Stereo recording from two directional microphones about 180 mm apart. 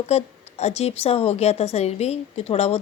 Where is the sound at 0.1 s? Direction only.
35° left (ahead or behind).